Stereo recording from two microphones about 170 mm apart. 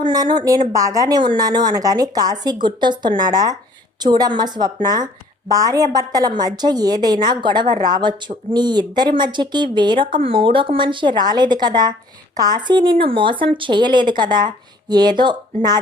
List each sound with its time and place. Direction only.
0.0 s speech: 25° right (ahead or behind)